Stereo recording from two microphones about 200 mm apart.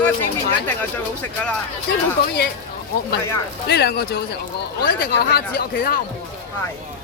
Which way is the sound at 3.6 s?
55° left (ahead or behind).